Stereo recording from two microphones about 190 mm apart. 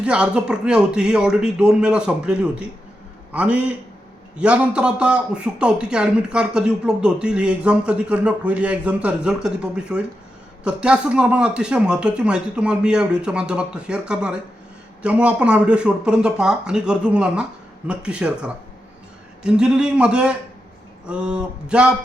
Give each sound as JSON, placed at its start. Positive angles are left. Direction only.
{"t": 0.0, "sound": "a man's voice", "side_deg": -5}